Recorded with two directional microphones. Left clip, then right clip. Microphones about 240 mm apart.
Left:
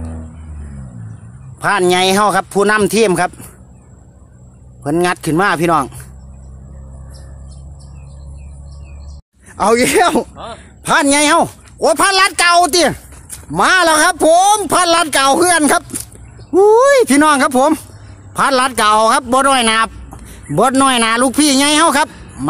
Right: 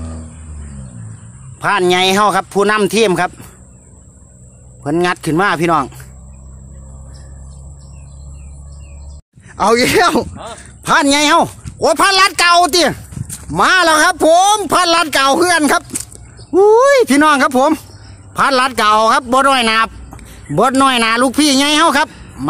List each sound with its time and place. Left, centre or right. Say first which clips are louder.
1.6 s speech: even; centre
4.8 s speech: even; centre
9.6 s speech: even; centre
10.3 s speech: even; centre
10.8 s speech: right 1 dB; centre